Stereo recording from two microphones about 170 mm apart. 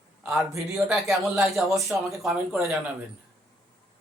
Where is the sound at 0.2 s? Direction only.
5° right (ahead or behind).